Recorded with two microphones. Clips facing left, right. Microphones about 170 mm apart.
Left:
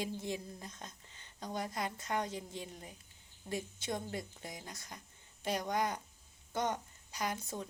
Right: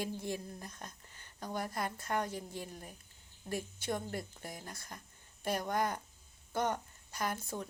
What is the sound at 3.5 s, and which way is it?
Speech, 55° right (ahead or behind).